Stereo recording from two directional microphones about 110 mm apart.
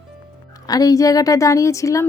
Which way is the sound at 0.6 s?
35° left (ahead or behind).